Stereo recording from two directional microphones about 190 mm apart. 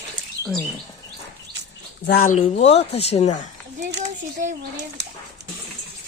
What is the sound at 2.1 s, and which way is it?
Speech, 45° left (ahead or behind).